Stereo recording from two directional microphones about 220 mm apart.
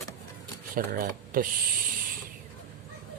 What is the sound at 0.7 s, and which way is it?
Speech, 40° right (ahead or behind).